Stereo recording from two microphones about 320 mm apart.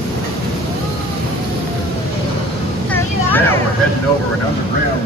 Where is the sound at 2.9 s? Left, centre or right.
Centre.